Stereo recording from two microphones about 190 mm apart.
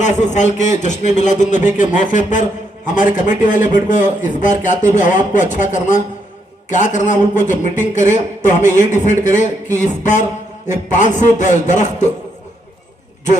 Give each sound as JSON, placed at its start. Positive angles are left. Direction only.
{"t": 0.0, "sound": "speech", "side_deg": 40}